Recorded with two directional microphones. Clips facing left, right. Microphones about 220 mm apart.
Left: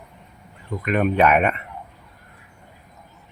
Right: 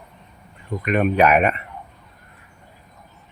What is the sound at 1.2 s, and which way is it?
Speech, 30° right (ahead or behind).